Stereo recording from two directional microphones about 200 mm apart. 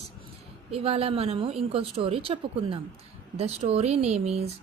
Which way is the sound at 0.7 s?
30° right (ahead or behind).